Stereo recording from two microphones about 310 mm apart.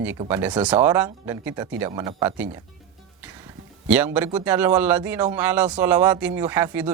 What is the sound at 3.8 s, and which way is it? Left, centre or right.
A man's voice, centre.